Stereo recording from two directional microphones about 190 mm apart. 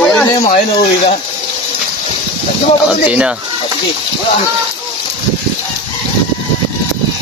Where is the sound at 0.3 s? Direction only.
35° left (ahead or behind).